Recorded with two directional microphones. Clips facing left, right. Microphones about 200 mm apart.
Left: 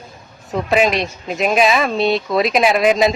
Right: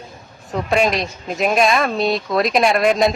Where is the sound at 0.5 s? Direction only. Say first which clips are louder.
Left 2 dB; centre (ahead or behind).